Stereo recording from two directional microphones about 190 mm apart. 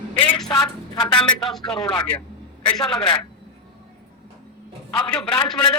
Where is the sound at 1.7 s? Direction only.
25° left (ahead or behind).